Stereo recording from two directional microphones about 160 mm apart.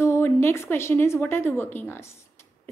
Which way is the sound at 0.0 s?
15° left (ahead or behind).